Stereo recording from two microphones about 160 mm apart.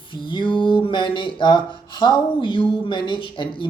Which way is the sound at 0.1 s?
30° left (ahead or behind).